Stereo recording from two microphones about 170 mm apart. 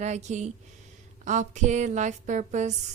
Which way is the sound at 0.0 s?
45° right (ahead or behind).